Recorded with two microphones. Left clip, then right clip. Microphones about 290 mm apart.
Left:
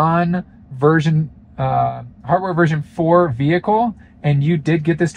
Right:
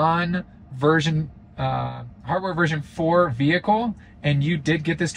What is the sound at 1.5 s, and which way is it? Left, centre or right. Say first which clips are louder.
Speech: left 9 dB; centre.